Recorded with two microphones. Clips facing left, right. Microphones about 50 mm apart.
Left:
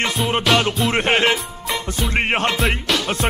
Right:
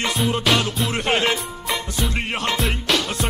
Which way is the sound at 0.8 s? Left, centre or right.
Left.